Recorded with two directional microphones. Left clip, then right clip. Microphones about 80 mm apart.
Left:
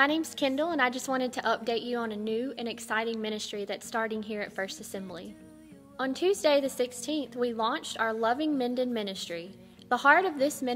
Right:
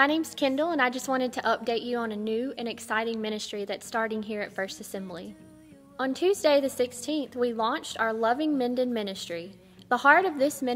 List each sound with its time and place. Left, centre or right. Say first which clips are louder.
0.0 s a woman's voice: right 2 dB; right